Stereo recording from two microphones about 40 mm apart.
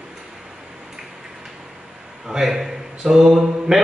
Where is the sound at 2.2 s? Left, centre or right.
Centre.